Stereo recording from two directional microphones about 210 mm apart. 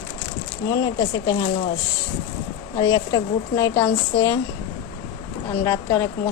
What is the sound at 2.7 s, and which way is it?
Speech, 15° left (ahead or behind).